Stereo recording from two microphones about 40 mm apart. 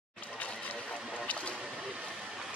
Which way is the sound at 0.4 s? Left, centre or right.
Left.